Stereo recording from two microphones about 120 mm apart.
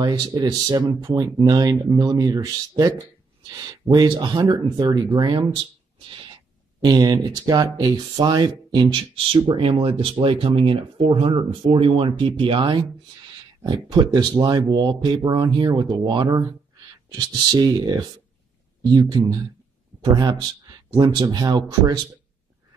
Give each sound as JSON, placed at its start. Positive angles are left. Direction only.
{"t": 0.0, "sound": "speech", "side_deg": -35}
{"t": 5.6, "sound": "speech", "side_deg": -45}
{"t": 13.8, "sound": "speech", "side_deg": -35}